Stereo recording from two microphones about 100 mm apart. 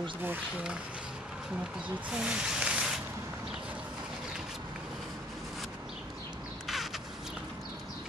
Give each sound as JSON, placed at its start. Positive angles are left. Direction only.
{"t": 0.2, "sound": "speech", "side_deg": -20}
{"t": 2.0, "sound": "speech", "side_deg": -10}
{"t": 6.7, "sound": "crow", "side_deg": 0}